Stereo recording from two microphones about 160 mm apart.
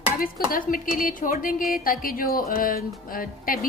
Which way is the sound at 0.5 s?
60° left (ahead or behind).